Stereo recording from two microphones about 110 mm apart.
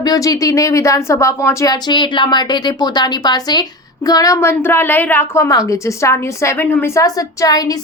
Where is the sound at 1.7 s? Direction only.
40° left (ahead or behind); by 6.9 s 15° left (ahead or behind).